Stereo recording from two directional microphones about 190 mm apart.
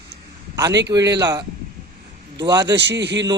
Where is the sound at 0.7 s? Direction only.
65° right (ahead or behind).